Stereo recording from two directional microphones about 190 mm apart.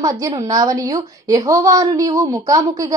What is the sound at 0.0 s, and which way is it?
A woman's voice, 20° right (ahead or behind).